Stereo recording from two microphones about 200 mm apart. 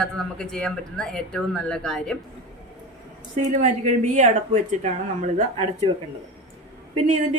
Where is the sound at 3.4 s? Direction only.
40° right (ahead or behind).